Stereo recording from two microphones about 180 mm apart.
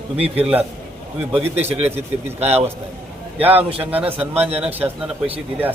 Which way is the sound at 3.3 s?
30° right (ahead or behind).